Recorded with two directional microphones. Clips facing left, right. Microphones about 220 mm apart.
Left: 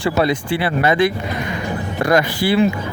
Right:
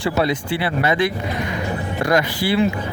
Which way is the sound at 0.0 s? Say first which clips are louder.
Left 2 dB; 45° left (ahead or behind).